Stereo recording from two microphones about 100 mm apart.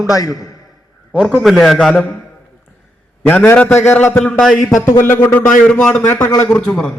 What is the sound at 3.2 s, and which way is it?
Speech, 20° left (ahead or behind).